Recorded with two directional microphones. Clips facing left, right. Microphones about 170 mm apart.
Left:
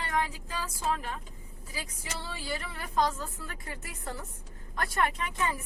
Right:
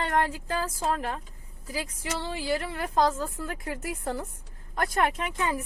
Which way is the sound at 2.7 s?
45° right (ahead or behind).